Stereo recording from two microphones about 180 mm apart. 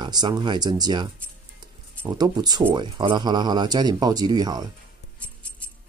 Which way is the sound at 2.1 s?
25° right (ahead or behind).